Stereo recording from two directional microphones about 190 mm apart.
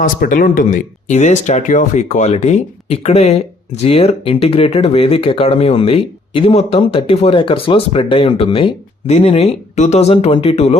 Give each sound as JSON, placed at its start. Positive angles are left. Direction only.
{"t": 0.0, "sound": "speech", "side_deg": 45}